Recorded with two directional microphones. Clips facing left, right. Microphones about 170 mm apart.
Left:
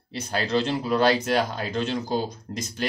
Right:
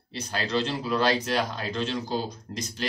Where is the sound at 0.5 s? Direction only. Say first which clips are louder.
Left 3 dB; 50° left (ahead or behind).